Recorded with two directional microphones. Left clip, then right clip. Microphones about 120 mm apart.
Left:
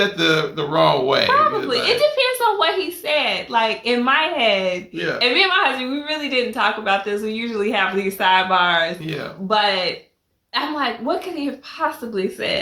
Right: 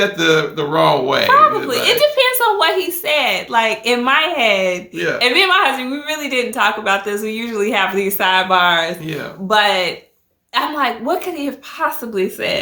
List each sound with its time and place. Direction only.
0.0 s speech: 5° left (ahead or behind)
1.3 s a woman's voice: 40° right (ahead or behind)
4.9 s speech: centre (ahead or behind)
5.2 s a woman's voice: 40° right (ahead or behind)